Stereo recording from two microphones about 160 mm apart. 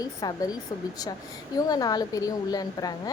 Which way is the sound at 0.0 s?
25° left (ahead or behind).